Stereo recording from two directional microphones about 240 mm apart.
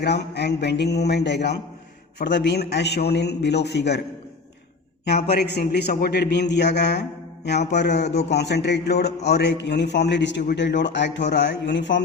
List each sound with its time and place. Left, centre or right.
0.0 s a man's voice: left
5.3 s a man's voice: left